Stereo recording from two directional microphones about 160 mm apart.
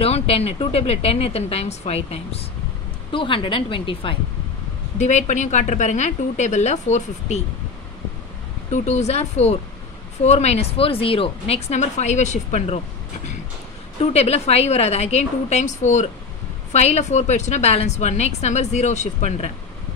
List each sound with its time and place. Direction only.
0.0 s speech: 40° left (ahead or behind)
4.9 s a woman's voice: 45° left (ahead or behind)
8.7 s a woman's voice: 45° left (ahead or behind)
14.1 s a woman's voice: 40° left (ahead or behind)